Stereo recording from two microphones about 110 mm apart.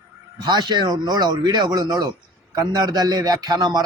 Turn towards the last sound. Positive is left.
turn(degrees=-35)  # may be behind; listen again after turning